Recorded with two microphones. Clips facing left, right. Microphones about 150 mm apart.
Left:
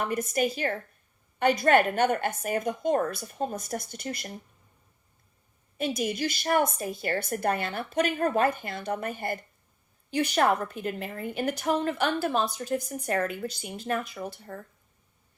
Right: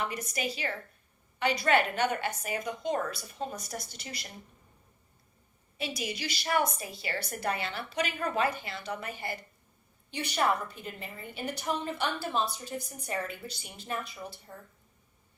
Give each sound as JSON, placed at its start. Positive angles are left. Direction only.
{"t": 0.0, "sound": "a woman's voice", "side_deg": 50}
{"t": 5.7, "sound": "a woman's voice", "side_deg": 50}